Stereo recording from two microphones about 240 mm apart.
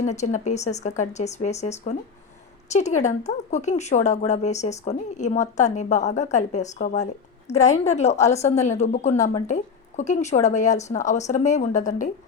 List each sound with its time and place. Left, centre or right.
0.0 s speech: left